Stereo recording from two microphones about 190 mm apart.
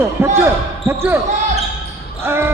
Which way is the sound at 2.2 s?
10° right (ahead or behind).